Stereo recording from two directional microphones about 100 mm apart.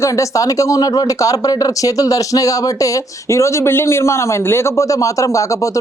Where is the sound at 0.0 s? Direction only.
30° left (ahead or behind).